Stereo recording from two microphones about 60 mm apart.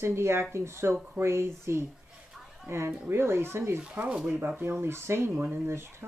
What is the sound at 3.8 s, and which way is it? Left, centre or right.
Speech, centre.